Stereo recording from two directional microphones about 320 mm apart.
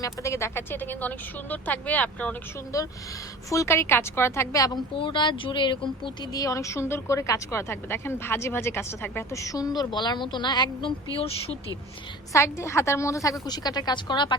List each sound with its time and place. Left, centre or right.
0.0 s speech: centre